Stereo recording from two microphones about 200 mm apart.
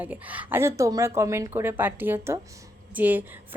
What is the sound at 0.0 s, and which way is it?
A woman's voice, 10° right (ahead or behind).